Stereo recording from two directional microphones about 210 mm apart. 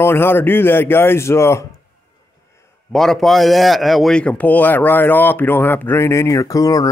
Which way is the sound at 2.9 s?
Centre (ahead or behind).